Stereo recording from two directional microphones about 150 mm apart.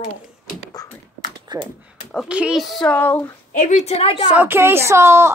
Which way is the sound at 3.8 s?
40° left (ahead or behind).